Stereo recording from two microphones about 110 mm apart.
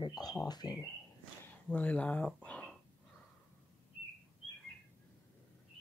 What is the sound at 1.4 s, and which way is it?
Speech, 15° left (ahead or behind).